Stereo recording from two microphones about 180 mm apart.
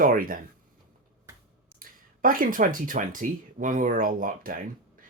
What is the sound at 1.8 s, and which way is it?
Speech, 50° right (ahead or behind).